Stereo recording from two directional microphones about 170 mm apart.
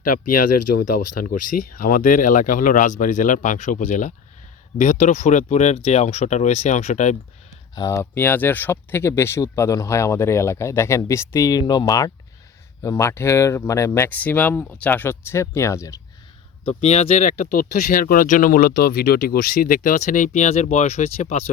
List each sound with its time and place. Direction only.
0.0 s speech: 55° left (ahead or behind)
7.8 s speech: 15° left (ahead or behind)
16.6 s speech: 40° left (ahead or behind)